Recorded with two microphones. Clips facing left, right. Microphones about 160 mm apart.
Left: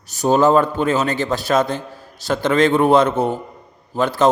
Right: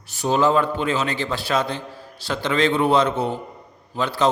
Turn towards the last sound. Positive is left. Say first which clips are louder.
# left 5 dB
turn(degrees=45)  # may be behind; listen again after turning